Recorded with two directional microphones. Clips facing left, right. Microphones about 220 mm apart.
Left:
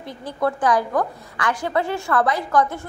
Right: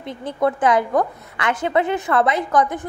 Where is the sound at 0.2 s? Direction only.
20° right (ahead or behind).